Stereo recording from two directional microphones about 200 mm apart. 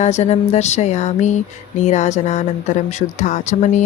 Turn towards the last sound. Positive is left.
turn(degrees=35)  # may be behind; listen again after turning